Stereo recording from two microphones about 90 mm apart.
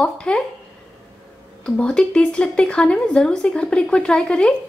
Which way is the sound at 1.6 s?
10° left (ahead or behind).